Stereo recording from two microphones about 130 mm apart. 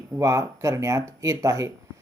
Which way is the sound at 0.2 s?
25° right (ahead or behind).